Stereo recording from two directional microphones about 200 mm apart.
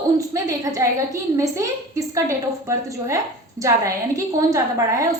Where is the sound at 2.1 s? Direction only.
15° right (ahead or behind).